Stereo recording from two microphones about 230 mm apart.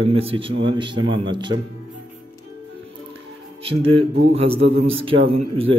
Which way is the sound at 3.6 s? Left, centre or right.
Right.